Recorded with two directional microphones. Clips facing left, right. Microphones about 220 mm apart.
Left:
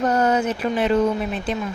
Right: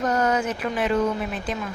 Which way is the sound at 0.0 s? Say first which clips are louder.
Left 3 dB; 30° left (ahead or behind).